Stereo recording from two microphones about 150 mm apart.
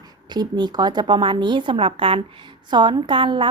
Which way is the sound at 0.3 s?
30° right (ahead or behind).